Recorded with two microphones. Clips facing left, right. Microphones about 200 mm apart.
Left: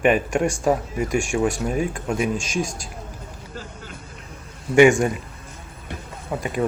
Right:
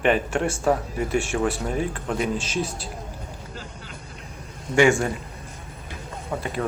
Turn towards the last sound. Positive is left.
turn(degrees=10)  # may be behind; listen again after turning